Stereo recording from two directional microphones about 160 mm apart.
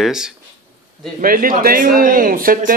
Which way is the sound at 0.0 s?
5° right (ahead or behind).